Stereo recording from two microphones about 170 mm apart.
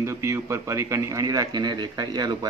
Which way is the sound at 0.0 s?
15° right (ahead or behind).